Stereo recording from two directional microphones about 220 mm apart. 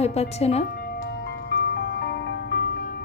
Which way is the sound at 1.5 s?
50° left (ahead or behind).